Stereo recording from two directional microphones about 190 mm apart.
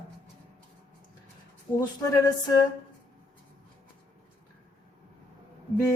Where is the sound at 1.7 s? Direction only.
15° left (ahead or behind).